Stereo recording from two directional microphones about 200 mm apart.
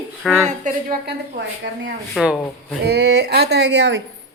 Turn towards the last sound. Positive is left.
turn(degrees=-60)  # may be behind; listen again after turning